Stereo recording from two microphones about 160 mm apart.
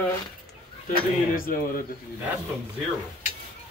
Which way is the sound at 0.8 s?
60° left (ahead or behind).